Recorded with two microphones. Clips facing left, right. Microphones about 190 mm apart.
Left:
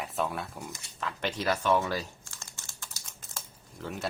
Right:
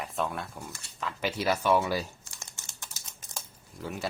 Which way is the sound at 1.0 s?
5° right (ahead or behind).